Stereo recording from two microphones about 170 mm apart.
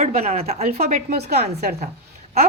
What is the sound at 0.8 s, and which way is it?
Speech, 65° right (ahead or behind).